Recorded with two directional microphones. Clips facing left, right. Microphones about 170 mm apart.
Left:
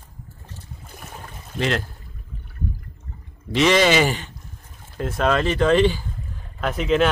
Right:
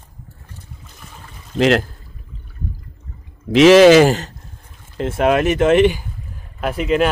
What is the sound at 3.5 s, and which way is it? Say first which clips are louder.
Speech: right 10 dB; 90° right.